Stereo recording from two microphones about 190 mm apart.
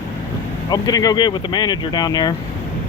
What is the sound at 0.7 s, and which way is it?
Speech, 20° left (ahead or behind).